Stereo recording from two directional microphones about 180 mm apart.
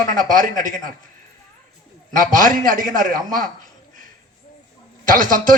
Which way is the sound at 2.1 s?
50° right (ahead or behind).